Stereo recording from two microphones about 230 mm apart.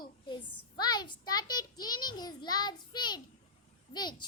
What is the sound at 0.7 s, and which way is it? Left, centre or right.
A child's voice, centre.